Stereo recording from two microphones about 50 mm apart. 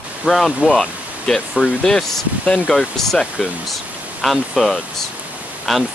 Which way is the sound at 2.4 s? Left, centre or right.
Left.